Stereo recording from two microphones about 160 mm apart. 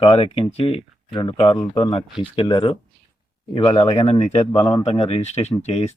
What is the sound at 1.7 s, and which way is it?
Speech, 20° left (ahead or behind).